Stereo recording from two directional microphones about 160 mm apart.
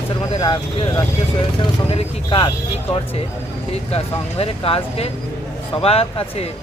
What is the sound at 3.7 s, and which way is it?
Speech, 40° left (ahead or behind).